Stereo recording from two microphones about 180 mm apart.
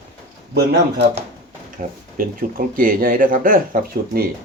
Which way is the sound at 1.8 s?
50° right (ahead or behind).